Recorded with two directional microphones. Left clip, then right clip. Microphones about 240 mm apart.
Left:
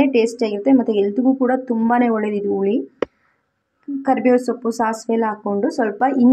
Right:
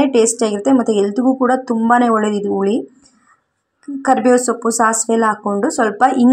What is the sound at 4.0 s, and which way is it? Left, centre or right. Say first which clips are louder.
A woman's voice: right 4 dB; centre.